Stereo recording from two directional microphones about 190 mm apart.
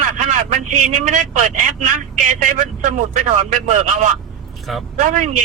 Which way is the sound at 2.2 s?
40° right (ahead or behind).